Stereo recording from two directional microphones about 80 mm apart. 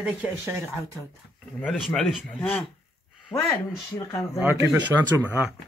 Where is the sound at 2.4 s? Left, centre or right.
Centre.